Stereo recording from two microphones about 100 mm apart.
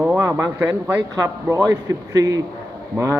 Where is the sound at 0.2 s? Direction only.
30° right (ahead or behind).